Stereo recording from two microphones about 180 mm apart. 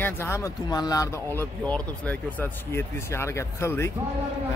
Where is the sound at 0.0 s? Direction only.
15° left (ahead or behind).